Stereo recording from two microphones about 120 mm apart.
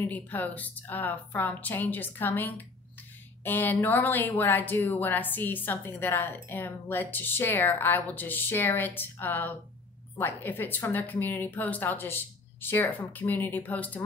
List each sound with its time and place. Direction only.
0.0 s speech: 15° left (ahead or behind)